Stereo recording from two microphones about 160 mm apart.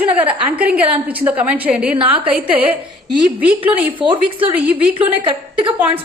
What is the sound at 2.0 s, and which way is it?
Speech, 35° right (ahead or behind).